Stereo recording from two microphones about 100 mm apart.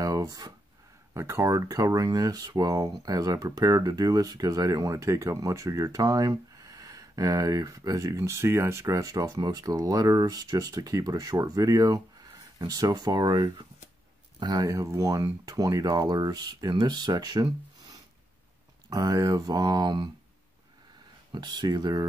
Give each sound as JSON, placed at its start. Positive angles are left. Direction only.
{"t": 0.0, "sound": "a sound", "side_deg": -35}
{"t": 1.1, "sound": "speech", "side_deg": -25}
{"t": 14.4, "sound": "speech", "side_deg": -40}
{"t": 21.3, "sound": "speech", "side_deg": -45}